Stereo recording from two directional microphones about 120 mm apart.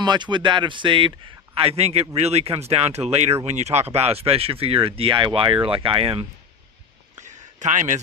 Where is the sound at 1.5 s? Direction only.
55° right (ahead or behind).